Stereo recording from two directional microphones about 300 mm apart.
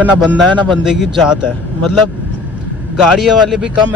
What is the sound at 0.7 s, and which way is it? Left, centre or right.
A man's voice, centre.